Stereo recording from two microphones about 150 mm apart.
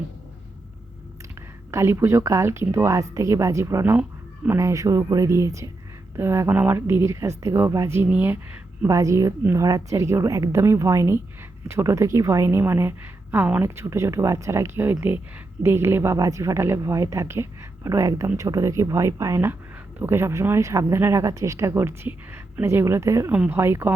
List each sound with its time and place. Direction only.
1.4 s a woman's voice: 15° right (ahead or behind)